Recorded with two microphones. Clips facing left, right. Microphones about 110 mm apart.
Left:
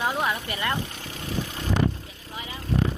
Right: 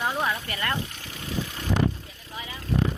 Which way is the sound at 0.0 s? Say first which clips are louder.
Left 1 dB; 15° left (ahead or behind).